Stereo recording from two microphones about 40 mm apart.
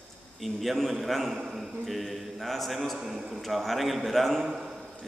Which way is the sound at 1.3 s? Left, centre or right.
Centre.